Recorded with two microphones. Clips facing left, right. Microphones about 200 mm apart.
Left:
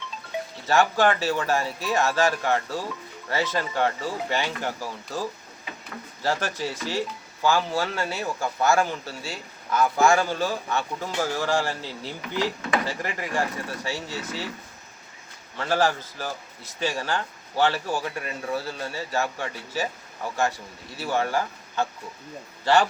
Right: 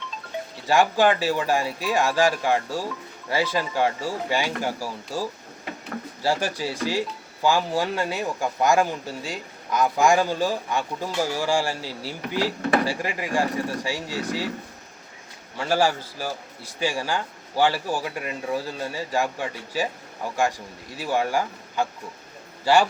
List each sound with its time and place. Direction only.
0.7 s a man's voice: 15° right (ahead or behind)
12.2 s speech: 40° right (ahead or behind)
12.8 s a man's voice: 10° right (ahead or behind)
15.5 s a man's voice: 10° right (ahead or behind)